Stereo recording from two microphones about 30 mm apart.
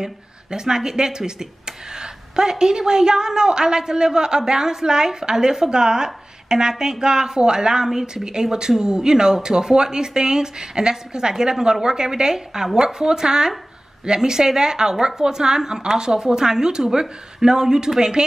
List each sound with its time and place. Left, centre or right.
0.0 s speech: right